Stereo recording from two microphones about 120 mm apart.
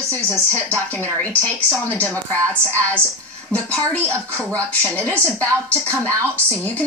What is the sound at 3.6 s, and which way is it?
Speech, 10° left (ahead or behind).